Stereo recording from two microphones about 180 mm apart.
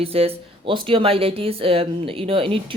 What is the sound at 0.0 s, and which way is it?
Speech, 35° right (ahead or behind).